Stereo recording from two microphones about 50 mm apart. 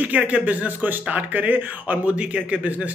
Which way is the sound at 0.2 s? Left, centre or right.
Right.